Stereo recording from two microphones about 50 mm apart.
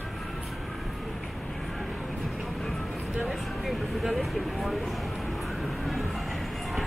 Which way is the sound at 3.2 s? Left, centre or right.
Centre.